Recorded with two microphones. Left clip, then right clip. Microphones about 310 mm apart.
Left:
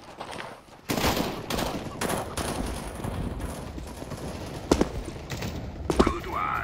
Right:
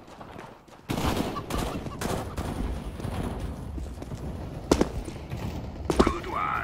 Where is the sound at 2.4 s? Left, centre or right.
Left.